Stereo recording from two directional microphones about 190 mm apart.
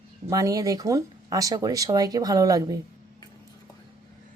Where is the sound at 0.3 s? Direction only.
15° right (ahead or behind).